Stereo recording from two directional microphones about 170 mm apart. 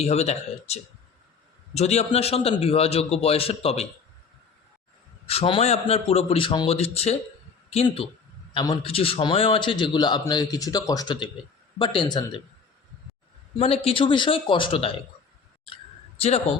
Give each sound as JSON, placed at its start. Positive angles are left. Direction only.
{"t": 0.0, "sound": "a man's voice", "side_deg": 40}
{"t": 5.3, "sound": "a man's voice", "side_deg": 35}
{"t": 13.6, "sound": "a man's voice", "side_deg": 35}